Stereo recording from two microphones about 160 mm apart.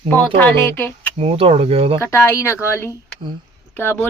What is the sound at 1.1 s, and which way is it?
Speech, 40° right (ahead or behind).